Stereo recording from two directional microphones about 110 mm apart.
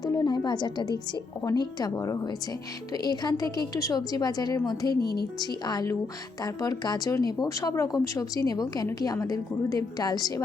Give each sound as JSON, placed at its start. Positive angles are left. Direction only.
{"t": 0.0, "sound": "speech", "side_deg": 35}